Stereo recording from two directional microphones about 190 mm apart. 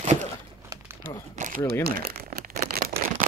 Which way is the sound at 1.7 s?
55° right (ahead or behind).